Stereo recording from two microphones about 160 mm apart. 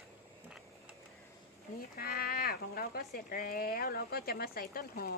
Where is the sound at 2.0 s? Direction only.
70° left (ahead or behind).